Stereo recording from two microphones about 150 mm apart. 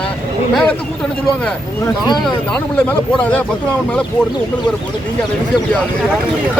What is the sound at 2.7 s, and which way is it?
Speech, 10° left (ahead or behind).